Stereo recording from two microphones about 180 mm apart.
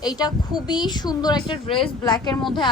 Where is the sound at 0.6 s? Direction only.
25° left (ahead or behind).